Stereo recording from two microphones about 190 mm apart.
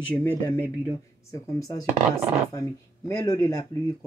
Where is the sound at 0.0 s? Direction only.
10° left (ahead or behind).